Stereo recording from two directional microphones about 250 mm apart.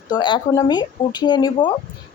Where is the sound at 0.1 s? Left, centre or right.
Centre.